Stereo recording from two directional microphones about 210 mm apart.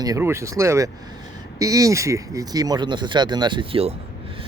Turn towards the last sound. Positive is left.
turn(degrees=-25)  # may be behind; listen again after turning